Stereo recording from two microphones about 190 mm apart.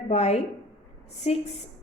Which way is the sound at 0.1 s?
35° left (ahead or behind).